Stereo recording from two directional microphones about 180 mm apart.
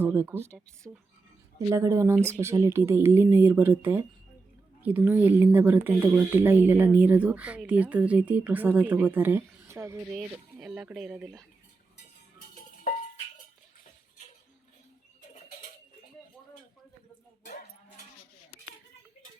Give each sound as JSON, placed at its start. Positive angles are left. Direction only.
{"t": 0.0, "sound": "speech", "side_deg": -10}
{"t": 10.2, "sound": "speech", "side_deg": -5}
{"t": 12.9, "sound": "music", "side_deg": 50}